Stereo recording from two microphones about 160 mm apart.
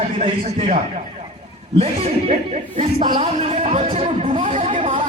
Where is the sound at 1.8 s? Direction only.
35° right (ahead or behind).